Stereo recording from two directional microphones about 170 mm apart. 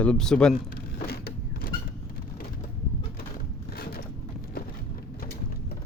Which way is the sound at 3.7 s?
70° left (ahead or behind).